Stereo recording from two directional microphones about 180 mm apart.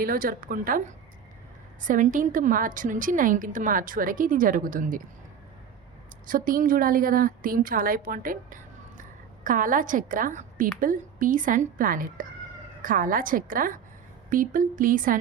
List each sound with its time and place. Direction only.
0.0 s a woman's voice: 50° right (ahead or behind)
1.8 s a woman's voice: 45° right (ahead or behind)
6.2 s a woman's voice: 50° right (ahead or behind)